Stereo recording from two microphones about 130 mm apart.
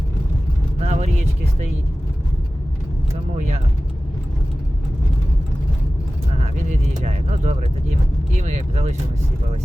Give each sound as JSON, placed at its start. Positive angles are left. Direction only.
{"t": 0.8, "sound": "vehicle", "side_deg": -55}
{"t": 3.3, "sound": "speech", "side_deg": -70}
{"t": 6.7, "sound": "vehicle", "side_deg": -60}
{"t": 8.4, "sound": "speech", "side_deg": -65}